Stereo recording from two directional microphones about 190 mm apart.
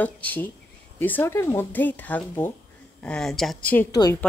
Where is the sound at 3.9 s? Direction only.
20° left (ahead or behind).